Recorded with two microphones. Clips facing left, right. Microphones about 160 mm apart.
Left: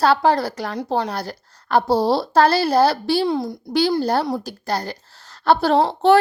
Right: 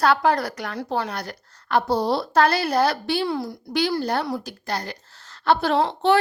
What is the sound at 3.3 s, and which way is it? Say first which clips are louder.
Speech: left 4 dB; 20° left (ahead or behind).